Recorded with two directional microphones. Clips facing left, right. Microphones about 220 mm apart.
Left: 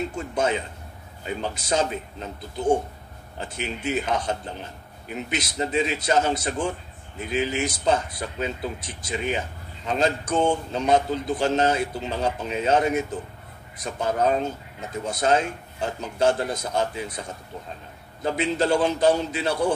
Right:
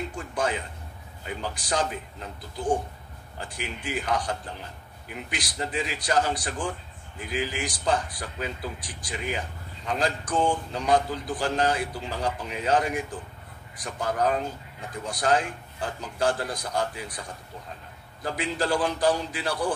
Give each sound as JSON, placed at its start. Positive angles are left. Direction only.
{"t": 0.1, "sound": "speech", "side_deg": 25}